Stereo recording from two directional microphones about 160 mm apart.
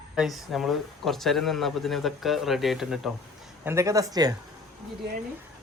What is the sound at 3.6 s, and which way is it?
Speech, 20° right (ahead or behind).